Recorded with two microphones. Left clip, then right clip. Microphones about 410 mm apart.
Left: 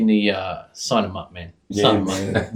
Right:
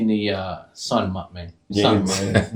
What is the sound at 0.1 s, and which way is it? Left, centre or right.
Speech, left.